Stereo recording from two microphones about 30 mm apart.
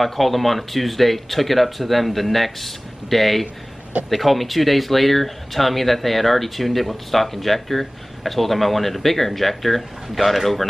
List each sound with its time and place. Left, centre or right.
0.0 s speech: centre